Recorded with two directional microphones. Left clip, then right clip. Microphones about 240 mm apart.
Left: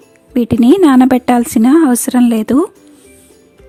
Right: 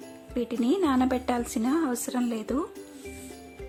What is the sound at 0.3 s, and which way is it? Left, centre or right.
A woman's voice, left.